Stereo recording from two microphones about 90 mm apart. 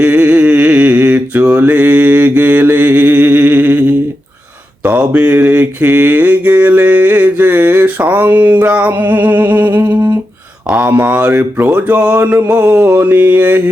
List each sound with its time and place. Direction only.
0.0 s a sound: 15° right (ahead or behind)
1.5 s mantra: 20° right (ahead or behind)
8.6 s music: 20° right (ahead or behind)
10.7 s speech: 15° right (ahead or behind)
12.5 s music: 20° right (ahead or behind)